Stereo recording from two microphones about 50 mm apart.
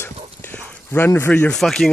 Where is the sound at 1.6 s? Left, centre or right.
Centre.